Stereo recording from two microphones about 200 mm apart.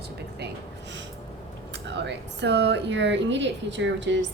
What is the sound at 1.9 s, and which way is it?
Speech, 60° right (ahead or behind).